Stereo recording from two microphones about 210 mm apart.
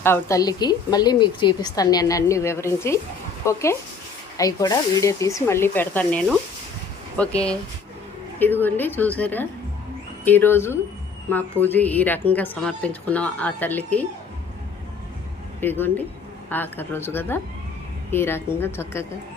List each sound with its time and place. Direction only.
0.0 s a woman's voice: 10° left (ahead or behind)
15.6 s a woman's voice: 10° left (ahead or behind)